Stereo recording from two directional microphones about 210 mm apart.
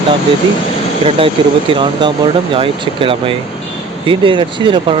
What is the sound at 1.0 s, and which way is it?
Speech, 25° right (ahead or behind).